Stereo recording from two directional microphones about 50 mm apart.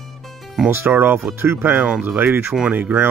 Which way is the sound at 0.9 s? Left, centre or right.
Right.